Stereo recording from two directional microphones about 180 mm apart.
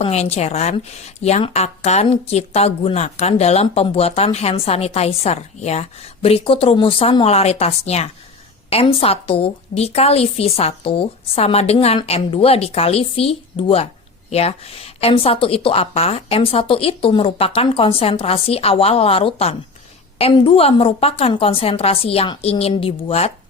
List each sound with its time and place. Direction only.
0.0 s a woman's voice: 35° left (ahead or behind)